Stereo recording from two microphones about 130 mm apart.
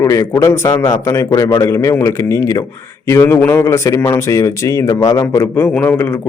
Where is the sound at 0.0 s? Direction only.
25° left (ahead or behind).